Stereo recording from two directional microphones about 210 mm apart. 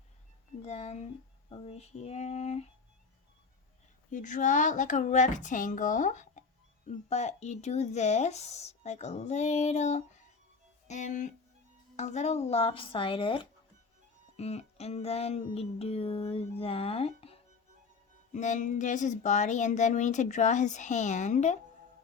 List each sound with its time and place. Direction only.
0.6 s music: 30° left (ahead or behind)
1.5 s speech: 25° left (ahead or behind)
4.1 s speech: 35° left (ahead or behind)
11.9 s music: 35° left (ahead or behind)
18.3 s speech: 35° left (ahead or behind)